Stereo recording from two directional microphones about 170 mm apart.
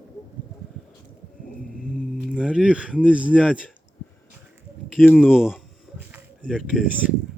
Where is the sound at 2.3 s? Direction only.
5° right (ahead or behind).